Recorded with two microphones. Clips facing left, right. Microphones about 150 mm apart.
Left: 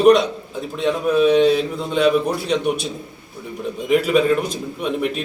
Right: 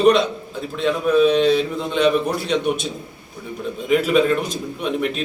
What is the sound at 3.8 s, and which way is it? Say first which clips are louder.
Speech: left 1 dB; 5° left (ahead or behind).